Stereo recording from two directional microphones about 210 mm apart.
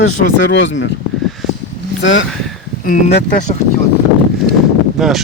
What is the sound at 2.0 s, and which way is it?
Speech, 65° left (ahead or behind).